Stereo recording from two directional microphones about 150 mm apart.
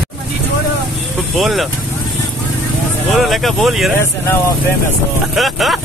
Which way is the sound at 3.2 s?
Centre (ahead or behind).